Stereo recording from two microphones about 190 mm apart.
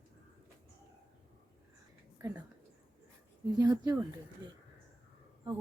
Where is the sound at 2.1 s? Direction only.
15° right (ahead or behind).